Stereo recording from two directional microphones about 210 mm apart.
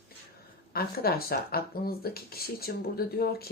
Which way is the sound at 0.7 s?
45° left (ahead or behind).